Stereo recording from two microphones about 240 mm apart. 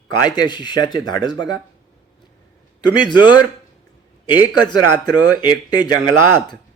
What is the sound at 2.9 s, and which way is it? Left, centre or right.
A man's voice, centre.